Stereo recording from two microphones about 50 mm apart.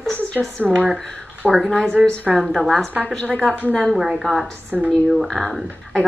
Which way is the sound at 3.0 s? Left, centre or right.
Centre.